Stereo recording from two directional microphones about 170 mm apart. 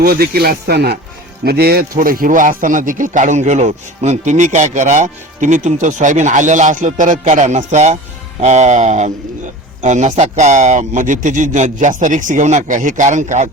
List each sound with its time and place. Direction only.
0.0 s speech: 65° right (ahead or behind); by 13.5 s 45° right (ahead or behind)